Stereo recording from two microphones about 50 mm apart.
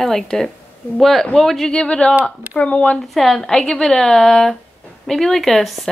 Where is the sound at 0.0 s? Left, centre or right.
Centre.